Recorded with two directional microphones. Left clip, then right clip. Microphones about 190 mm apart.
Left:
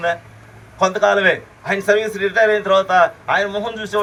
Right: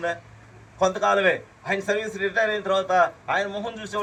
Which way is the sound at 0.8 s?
35° left (ahead or behind).